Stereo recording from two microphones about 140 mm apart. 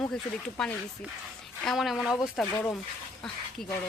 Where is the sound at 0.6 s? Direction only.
5° left (ahead or behind).